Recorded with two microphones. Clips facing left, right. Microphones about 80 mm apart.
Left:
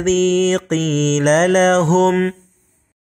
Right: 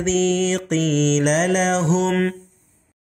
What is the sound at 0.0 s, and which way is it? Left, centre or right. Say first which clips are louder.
Mantra: left 4 dB; left.